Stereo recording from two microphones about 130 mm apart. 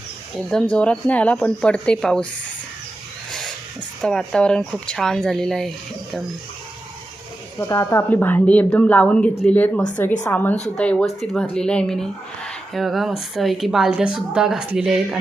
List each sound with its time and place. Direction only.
0.3 s speech: 5° left (ahead or behind)
3.3 s speech: 5° left (ahead or behind)
7.6 s a woman's voice: 25° left (ahead or behind); by 15.2 s 5° right (ahead or behind)